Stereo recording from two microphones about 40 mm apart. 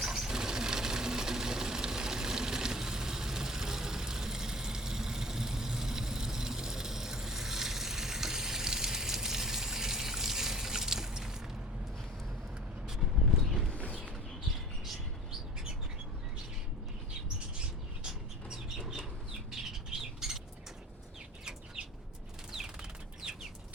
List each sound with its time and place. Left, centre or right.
0.0 s sewing machine: centre
13.7 s a sound: left
18.4 s bird: centre
22.5 s bird flight: centre